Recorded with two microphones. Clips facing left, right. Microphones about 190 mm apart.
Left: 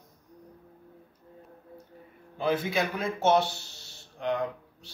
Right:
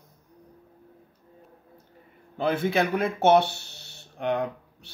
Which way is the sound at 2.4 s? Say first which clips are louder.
Right 3 dB; 60° right (ahead or behind).